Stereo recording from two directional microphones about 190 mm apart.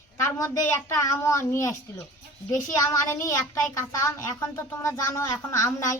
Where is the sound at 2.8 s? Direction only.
15° left (ahead or behind).